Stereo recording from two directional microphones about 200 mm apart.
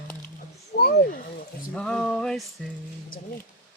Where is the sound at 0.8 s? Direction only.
45° left (ahead or behind).